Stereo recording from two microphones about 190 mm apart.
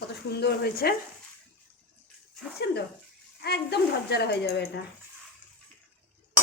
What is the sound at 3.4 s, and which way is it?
Speech, 60° left (ahead or behind).